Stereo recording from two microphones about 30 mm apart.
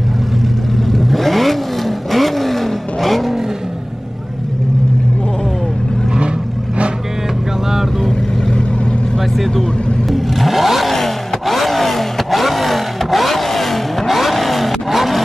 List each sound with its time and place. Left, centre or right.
1.0 s vehicle: centre
9.4 s vehicle: centre
10.9 s vehicle: centre